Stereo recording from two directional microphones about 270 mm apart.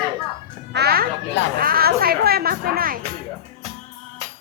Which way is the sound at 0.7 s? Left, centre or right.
Right.